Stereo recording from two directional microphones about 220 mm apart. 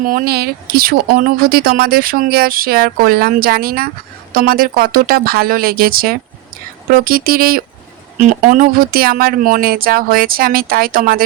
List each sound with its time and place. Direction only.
0.0 s speech: 40° right (ahead or behind)